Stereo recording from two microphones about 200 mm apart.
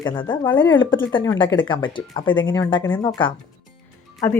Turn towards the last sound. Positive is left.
turn(degrees=15)  # may be behind; listen again after turning